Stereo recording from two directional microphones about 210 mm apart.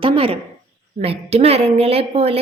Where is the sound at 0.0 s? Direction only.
25° right (ahead or behind).